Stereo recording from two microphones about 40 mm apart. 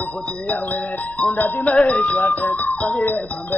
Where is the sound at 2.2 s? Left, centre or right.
Left.